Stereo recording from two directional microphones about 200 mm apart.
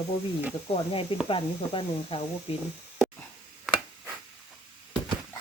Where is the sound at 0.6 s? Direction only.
30° left (ahead or behind).